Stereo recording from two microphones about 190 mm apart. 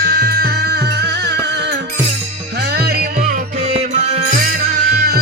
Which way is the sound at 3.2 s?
35° right (ahead or behind).